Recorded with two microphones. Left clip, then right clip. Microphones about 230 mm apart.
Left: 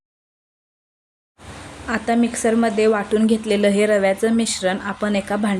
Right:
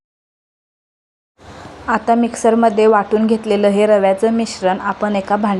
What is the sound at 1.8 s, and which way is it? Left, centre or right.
Speech, centre.